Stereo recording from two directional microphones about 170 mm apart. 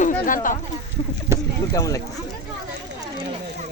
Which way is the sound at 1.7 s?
20° left (ahead or behind).